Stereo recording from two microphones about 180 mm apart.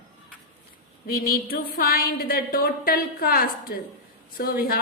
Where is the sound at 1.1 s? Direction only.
55° left (ahead or behind).